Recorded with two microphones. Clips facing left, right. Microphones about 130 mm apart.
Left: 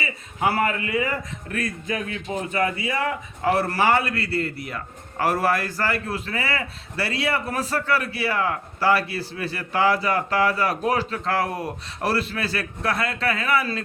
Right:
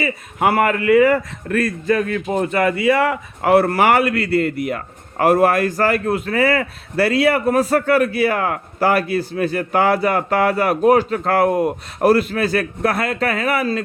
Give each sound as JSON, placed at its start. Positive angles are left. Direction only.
{"t": 0.0, "sound": "a man's voice", "side_deg": -55}
{"t": 2.1, "sound": "a man's voice", "side_deg": -55}
{"t": 11.4, "sound": "speech", "side_deg": -20}
{"t": 11.9, "sound": "a man's voice", "side_deg": -50}